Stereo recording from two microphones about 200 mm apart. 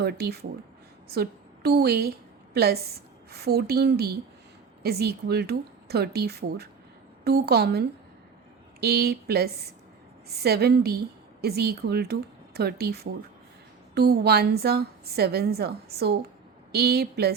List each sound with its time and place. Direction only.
0.0 s a woman's voice: 55° right (ahead or behind)